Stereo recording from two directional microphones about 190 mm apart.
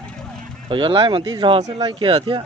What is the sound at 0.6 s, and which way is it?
Speech, 25° right (ahead or behind).